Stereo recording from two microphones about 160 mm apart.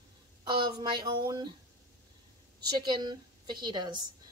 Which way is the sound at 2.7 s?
30° right (ahead or behind).